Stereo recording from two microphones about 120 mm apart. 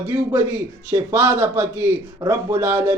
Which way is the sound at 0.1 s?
25° right (ahead or behind).